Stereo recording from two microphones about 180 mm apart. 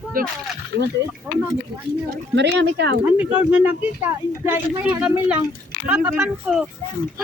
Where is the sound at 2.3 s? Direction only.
75° right (ahead or behind).